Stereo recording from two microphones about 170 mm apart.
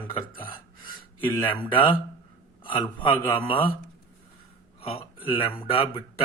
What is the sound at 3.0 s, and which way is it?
Speech, 30° left (ahead or behind).